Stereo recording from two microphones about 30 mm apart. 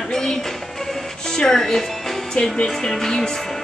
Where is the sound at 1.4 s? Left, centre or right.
Centre.